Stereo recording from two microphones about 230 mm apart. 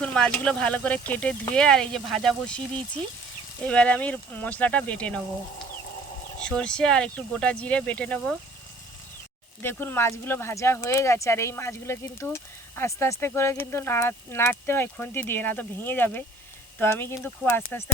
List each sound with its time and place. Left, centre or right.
0.0 s speech: centre
6.4 s speech: centre
9.6 s speech: centre